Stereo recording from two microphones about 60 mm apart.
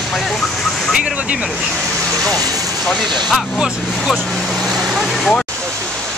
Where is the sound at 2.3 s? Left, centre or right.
Right.